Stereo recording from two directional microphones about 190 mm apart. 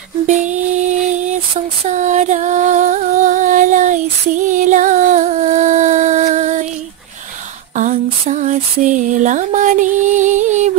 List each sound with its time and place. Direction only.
0.3 s female singing: 40° right (ahead or behind)
1.9 s music: 40° right (ahead or behind)
7.7 s a sound: 40° right (ahead or behind)